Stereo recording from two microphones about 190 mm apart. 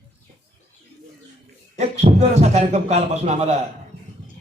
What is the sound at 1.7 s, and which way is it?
Speech, 35° right (ahead or behind).